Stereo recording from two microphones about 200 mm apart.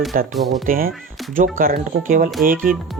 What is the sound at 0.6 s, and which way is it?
Speech, 45° right (ahead or behind).